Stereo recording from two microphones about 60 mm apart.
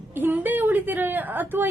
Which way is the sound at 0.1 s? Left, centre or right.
Right.